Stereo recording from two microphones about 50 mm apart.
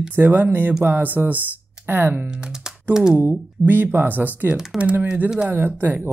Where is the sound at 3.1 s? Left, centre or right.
Right.